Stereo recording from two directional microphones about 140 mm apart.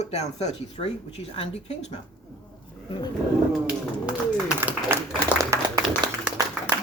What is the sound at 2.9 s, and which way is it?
Speech, 30° left (ahead or behind).